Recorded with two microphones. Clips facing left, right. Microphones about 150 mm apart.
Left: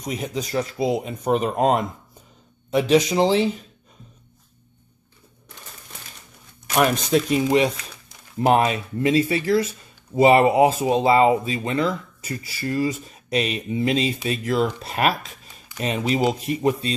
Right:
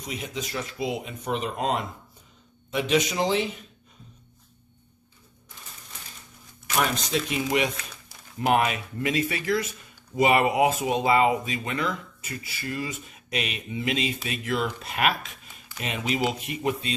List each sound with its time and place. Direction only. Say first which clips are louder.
0.0 s speech: left 6 dB; 40° left (ahead or behind)
2.7 s speech: left 7 dB; 35° left (ahead or behind)
7.1 s speech: left 8 dB; 40° left (ahead or behind)